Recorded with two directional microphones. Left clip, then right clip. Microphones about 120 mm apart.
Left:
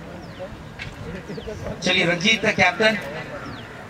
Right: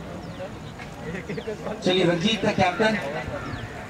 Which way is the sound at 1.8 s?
25° left (ahead or behind).